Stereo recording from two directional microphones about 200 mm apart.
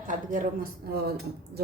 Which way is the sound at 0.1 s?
40° right (ahead or behind).